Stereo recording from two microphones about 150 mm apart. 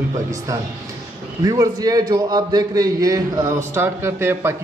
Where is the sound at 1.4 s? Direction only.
25° right (ahead or behind).